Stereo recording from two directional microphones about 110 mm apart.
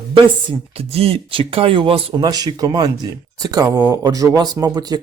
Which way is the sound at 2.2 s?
35° right (ahead or behind).